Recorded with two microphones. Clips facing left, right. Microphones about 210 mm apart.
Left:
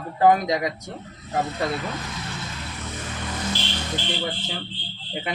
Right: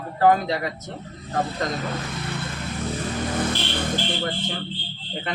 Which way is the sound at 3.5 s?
55° right (ahead or behind).